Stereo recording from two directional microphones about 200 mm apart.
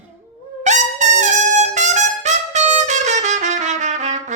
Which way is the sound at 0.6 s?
35° right (ahead or behind).